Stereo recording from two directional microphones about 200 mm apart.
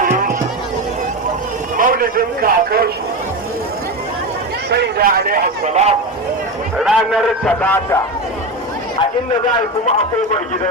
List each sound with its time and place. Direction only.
0.0 s music: 45° right (ahead or behind)
1.7 s a man's voice: 45° right (ahead or behind)
4.7 s a man's voice: 55° right (ahead or behind); by 6.0 s 35° right (ahead or behind)
6.7 s a man's voice: centre (ahead or behind)